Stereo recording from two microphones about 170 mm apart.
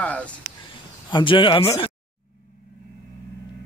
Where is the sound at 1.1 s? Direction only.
30° left (ahead or behind).